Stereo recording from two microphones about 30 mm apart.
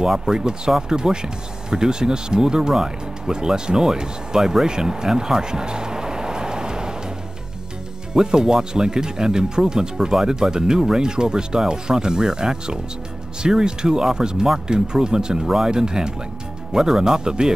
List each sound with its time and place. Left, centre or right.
0.2 s speech: right
4.6 s vehicle: right
8.1 s speech: right
16.7 s speech: centre
17.0 s speech: right